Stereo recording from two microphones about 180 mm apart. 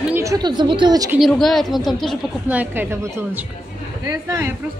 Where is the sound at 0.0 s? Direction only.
15° right (ahead or behind).